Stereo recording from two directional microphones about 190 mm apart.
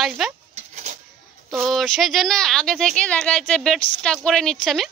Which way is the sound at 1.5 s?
Centre (ahead or behind).